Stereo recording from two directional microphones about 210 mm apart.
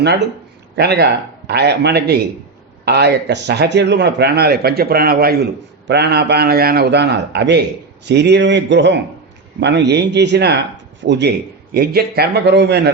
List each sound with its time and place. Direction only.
0.8 s a man's voice: 50° right (ahead or behind)